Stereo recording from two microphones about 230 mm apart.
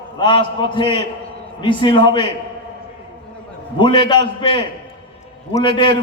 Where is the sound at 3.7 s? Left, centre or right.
Left.